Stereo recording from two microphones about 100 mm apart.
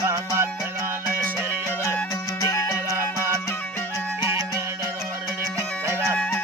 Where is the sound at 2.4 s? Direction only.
35° left (ahead or behind).